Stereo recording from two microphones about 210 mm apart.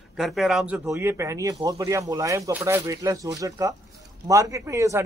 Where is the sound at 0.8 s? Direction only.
10° right (ahead or behind).